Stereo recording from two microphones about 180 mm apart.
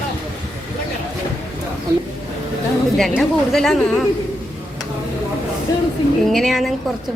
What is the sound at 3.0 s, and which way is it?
Speech, centre (ahead or behind).